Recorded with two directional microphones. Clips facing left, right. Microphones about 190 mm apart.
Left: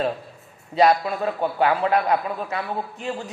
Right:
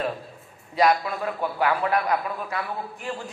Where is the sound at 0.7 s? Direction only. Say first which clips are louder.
Left 3 dB; 25° left (ahead or behind).